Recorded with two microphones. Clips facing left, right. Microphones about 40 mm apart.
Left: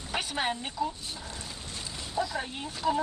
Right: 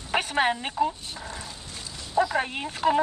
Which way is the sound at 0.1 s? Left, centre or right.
Right.